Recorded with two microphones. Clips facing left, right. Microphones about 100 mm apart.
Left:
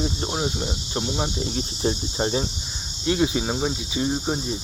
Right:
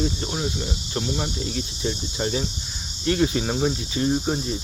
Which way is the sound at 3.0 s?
15° left (ahead or behind).